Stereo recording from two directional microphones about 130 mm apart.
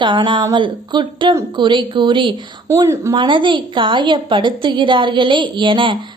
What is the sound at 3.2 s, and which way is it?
A woman's voice, 40° right (ahead or behind).